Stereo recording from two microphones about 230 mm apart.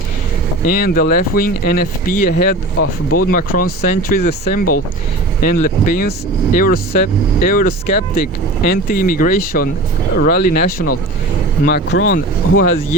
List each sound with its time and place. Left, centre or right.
0.6 s speech: left
2.7 s speech: left
3.8 s speech: left
12.1 s speech: left